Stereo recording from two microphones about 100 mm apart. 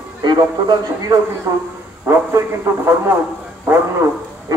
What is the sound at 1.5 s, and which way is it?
A man's voice, 30° right (ahead or behind).